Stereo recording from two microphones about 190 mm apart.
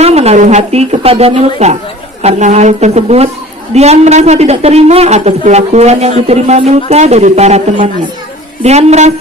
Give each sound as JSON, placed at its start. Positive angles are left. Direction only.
{"t": 0.0, "sound": "speech", "side_deg": -35}